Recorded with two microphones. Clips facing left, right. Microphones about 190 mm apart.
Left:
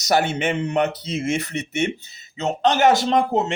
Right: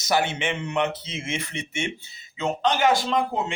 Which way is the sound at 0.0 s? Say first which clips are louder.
Left 4 dB; 45° left (ahead or behind).